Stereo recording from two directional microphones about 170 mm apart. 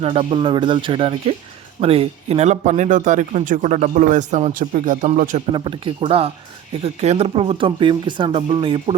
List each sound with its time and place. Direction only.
0.0 s speech: 35° right (ahead or behind)
5.5 s speech: 30° right (ahead or behind)